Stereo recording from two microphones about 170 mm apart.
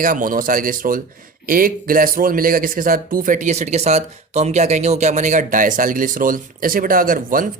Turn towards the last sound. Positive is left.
turn(degrees=-55)  # may be behind; listen again after turning